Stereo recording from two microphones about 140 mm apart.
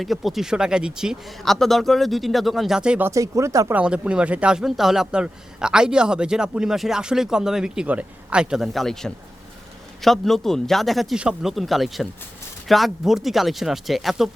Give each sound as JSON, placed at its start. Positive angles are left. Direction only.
{"t": 0.0, "sound": "speech", "side_deg": 0}
{"t": 3.1, "sound": "speech", "side_deg": -20}
{"t": 3.8, "sound": "speech", "side_deg": -5}